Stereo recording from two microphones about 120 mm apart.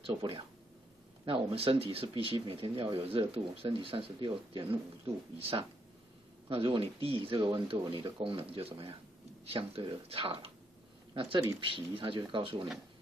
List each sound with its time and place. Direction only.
0.0 s speech: 50° right (ahead or behind)